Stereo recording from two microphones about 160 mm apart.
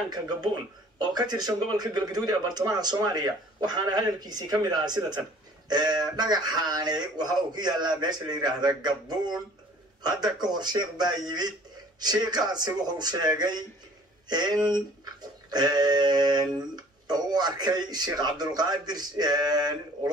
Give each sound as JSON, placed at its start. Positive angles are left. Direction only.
{"t": 1.1, "sound": "a man's voice", "side_deg": -25}